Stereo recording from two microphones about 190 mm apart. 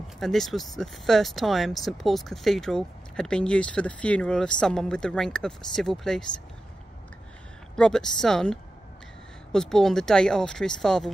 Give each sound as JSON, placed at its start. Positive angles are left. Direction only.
{"t": 0.2, "sound": "speech", "side_deg": 0}
{"t": 7.7, "sound": "speech", "side_deg": 5}